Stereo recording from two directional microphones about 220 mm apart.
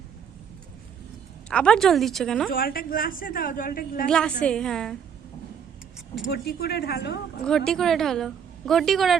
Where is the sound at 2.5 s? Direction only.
40° left (ahead or behind).